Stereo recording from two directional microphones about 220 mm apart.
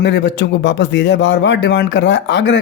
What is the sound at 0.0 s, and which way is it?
Speech, 55° left (ahead or behind).